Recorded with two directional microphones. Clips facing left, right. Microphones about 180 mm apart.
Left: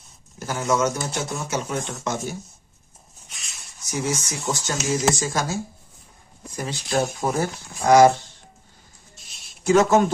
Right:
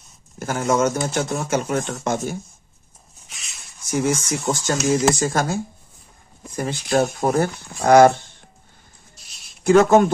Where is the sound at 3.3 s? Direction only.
Centre (ahead or behind).